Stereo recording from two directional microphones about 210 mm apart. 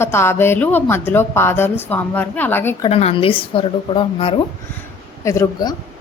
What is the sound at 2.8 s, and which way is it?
Speech, 30° left (ahead or behind).